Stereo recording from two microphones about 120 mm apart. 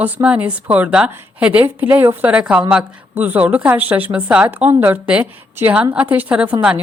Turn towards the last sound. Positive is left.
turn(degrees=-10)  # may be behind; listen again after turning